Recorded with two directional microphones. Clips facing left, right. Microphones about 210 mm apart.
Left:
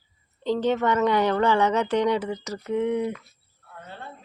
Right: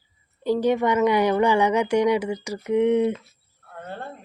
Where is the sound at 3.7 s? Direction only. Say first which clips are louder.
Right 6 dB; 50° right (ahead or behind).